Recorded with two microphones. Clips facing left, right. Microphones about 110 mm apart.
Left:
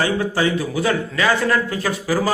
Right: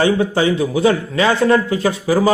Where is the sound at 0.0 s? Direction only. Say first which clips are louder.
Right 4 dB; 25° right (ahead or behind).